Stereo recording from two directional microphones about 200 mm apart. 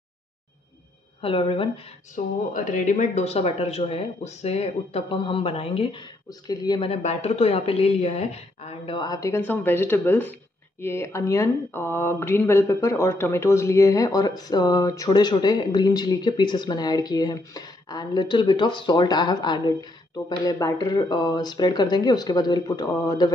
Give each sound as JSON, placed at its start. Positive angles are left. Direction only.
{"t": 1.2, "sound": "speech", "side_deg": 25}
{"t": 2.1, "sound": "speech", "side_deg": 40}
{"t": 6.9, "sound": "speech", "side_deg": 35}